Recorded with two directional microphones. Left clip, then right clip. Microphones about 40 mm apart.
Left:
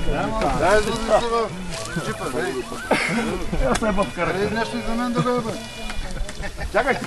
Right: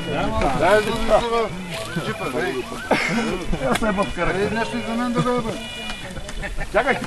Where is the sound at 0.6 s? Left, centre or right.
Right.